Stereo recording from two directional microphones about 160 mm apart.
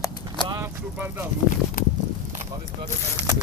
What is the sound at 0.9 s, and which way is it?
Speech, 10° right (ahead or behind).